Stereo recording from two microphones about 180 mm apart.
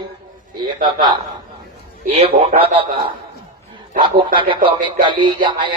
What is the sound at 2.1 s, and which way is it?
Speech, 35° right (ahead or behind).